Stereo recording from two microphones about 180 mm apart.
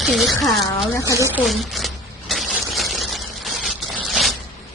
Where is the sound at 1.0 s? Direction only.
15° right (ahead or behind).